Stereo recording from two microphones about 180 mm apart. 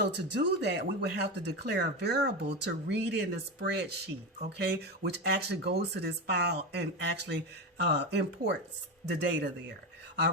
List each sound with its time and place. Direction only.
0.0 s speech: 70° right (ahead or behind)